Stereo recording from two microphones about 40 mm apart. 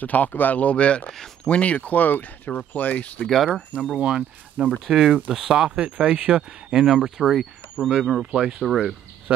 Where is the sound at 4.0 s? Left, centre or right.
Right.